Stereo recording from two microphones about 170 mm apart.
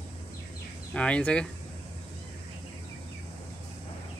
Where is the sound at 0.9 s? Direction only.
5° left (ahead or behind).